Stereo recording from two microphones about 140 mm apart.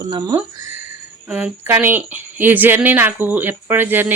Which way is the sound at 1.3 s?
15° right (ahead or behind).